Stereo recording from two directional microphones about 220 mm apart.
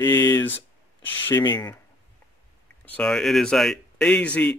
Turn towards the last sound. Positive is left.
turn(degrees=5)  # may be behind; listen again after turning